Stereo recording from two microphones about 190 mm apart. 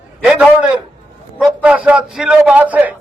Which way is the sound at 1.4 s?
5° right (ahead or behind).